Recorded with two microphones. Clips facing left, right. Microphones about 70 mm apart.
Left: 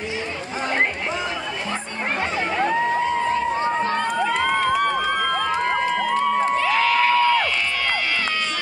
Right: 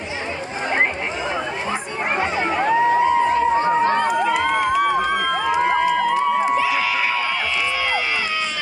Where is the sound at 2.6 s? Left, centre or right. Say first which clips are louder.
Right 5 dB; centre.